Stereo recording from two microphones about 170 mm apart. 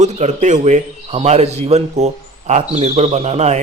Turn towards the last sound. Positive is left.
turn(degrees=-40)  # may be behind; listen again after turning